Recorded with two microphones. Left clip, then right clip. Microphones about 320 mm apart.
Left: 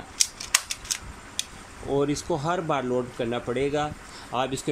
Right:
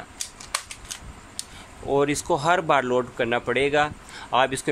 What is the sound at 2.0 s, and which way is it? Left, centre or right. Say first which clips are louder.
Speech: right 4 dB; right.